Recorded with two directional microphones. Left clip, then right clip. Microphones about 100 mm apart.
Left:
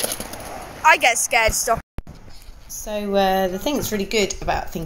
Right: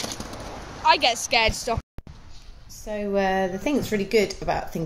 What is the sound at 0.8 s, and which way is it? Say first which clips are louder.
Speech: left 4 dB; 40° right (ahead or behind).